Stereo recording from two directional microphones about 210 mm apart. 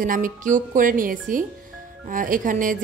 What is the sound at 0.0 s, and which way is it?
A woman's voice, 40° right (ahead or behind).